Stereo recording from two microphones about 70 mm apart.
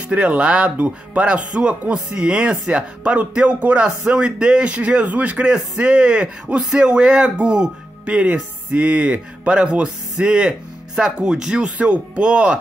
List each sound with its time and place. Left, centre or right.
0.1 s a man's voice: right